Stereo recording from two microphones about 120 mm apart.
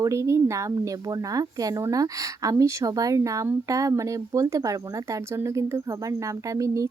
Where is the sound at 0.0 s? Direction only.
25° right (ahead or behind).